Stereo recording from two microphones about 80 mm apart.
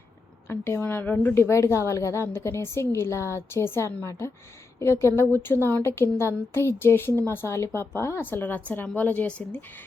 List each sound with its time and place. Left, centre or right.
0.4 s a woman's voice: left
1.4 s a woman's voice: left; by 9.6 s centre